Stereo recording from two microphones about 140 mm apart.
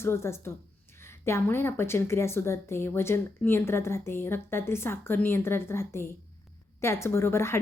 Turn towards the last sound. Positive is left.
turn(degrees=20)  # may be behind; listen again after turning